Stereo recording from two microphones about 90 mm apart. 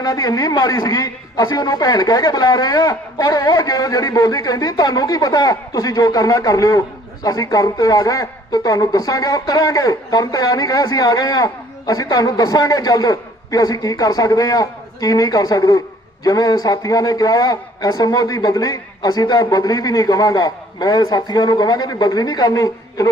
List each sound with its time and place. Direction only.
0.1 s a man's voice: 40° left (ahead or behind)
2.8 s a man's voice: 40° left (ahead or behind)